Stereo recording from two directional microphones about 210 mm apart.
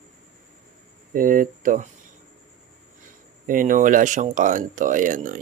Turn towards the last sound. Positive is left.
turn(degrees=-40)  # may be behind; listen again after turning